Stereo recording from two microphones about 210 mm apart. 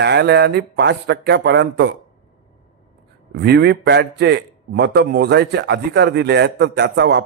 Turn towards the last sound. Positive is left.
turn(degrees=-55)  # may be behind; listen again after turning